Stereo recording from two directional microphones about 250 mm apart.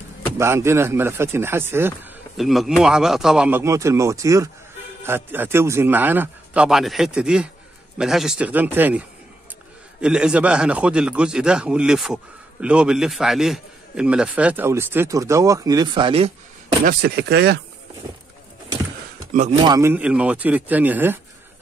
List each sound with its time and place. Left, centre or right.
0.4 s a man's voice: centre
16.8 s speech: right
19.5 s speech: centre